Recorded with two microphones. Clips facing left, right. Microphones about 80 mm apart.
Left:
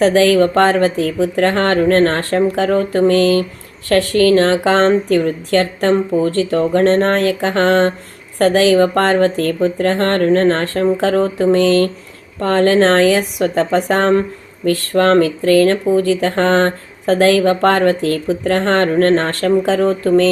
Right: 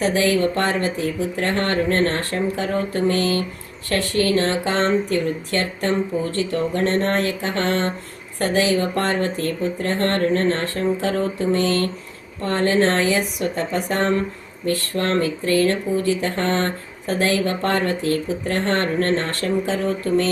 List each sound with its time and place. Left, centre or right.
0.0 s speech: left
3.2 s speech: left
13.1 s speech: left
14.6 s speech: left